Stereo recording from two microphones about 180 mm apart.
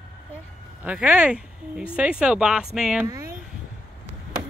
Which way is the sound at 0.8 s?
5° right (ahead or behind).